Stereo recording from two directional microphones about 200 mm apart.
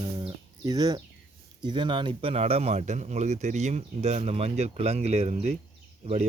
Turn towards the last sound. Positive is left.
turn(degrees=-30)  # may be behind; listen again after turning